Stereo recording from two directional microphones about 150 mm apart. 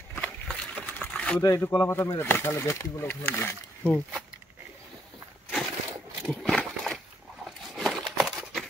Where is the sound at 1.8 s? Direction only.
20° left (ahead or behind).